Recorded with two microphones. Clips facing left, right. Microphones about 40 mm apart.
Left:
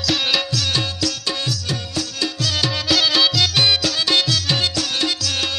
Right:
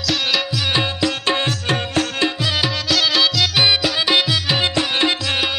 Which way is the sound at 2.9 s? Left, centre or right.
Centre.